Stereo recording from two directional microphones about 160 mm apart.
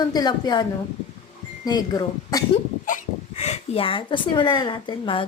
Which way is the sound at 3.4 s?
40° left (ahead or behind).